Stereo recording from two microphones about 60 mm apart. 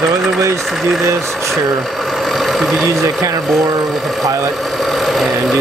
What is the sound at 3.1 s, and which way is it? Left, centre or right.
Speech, right.